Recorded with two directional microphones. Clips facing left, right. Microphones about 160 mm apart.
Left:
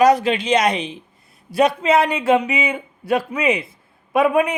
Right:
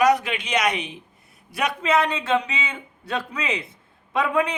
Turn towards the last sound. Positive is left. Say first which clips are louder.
# left 6 dB
turn(degrees=25)  # may be behind; listen again after turning